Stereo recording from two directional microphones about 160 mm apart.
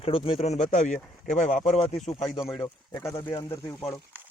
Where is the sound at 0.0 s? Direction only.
35° left (ahead or behind).